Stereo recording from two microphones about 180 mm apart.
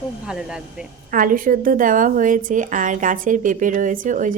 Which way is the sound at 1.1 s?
50° right (ahead or behind).